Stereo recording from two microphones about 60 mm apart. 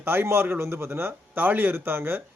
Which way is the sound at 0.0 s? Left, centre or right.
Right.